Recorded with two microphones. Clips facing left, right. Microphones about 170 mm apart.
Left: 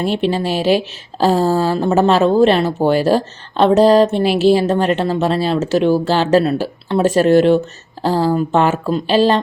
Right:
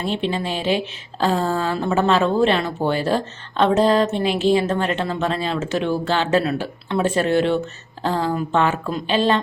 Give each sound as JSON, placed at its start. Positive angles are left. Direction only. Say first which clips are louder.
{"t": 0.0, "sound": "a woman's voice", "louder": "left 6 dB", "side_deg": 85}
{"t": 1.2, "sound": "speech", "louder": "left 6 dB", "side_deg": 35}